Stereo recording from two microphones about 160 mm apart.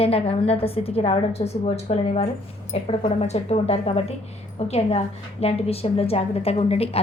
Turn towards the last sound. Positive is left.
turn(degrees=40)  # may be behind; listen again after turning